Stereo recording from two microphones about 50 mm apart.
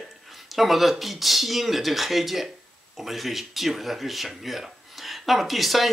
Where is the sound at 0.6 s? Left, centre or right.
Centre.